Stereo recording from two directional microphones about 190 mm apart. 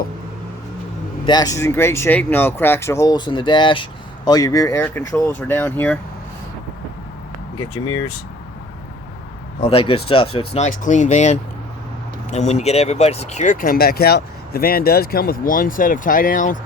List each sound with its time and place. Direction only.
1.2 s speech: 20° left (ahead or behind)
9.6 s speech: 30° left (ahead or behind)